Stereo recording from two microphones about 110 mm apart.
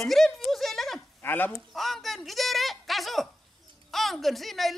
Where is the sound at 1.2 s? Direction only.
15° left (ahead or behind).